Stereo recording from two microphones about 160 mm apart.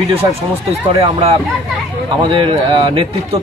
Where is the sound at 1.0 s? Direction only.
40° right (ahead or behind).